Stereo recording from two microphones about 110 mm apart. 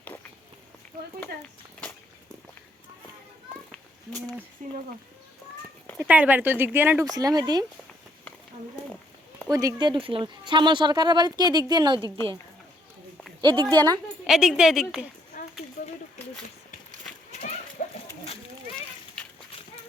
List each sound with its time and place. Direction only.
3.7 s children playing: 15° left (ahead or behind)
6.0 s speech: 15° right (ahead or behind)
7.0 s speech: 35° right (ahead or behind)
9.5 s speech: 30° right (ahead or behind)
12.0 s a woman's voice: 30° left (ahead or behind)
13.4 s a woman's voice: 45° right (ahead or behind)
14.3 s a woman's voice: 5° right (ahead or behind)